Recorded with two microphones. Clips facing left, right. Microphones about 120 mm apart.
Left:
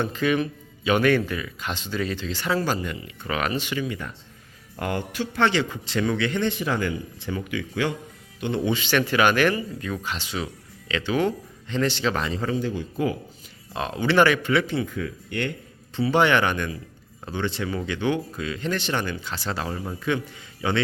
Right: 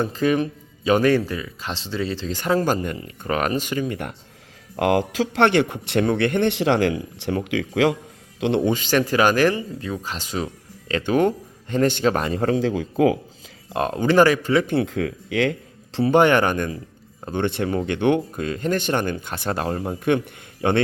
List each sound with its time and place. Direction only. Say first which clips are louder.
0.0 s a man's voice: right 3 dB; 35° right (ahead or behind)
2.3 s speech: right 6 dB; 45° right (ahead or behind)
4.8 s a man's voice: right 8 dB; 90° right
8.6 s speech: right 3 dB; 45° right (ahead or behind); by 13.1 s 90° right
13.7 s a man's voice: right 4 dB; 45° right (ahead or behind)
14.7 s speech: right 5 dB; 75° right (ahead or behind); by 15.5 s 90° right
16.0 s speech: right 4 dB; 50° right (ahead or behind)
17.3 s speech: right 5 dB; 55° right (ahead or behind)